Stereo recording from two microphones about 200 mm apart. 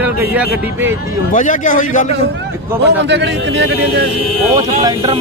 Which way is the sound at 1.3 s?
40° left (ahead or behind).